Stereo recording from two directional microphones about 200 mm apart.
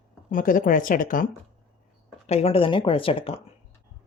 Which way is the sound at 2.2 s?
30° left (ahead or behind).